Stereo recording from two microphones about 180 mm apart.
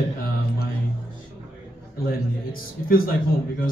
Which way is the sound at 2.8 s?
55° left (ahead or behind).